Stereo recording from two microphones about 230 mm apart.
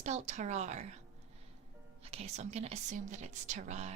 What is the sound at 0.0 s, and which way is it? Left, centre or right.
Speech, right.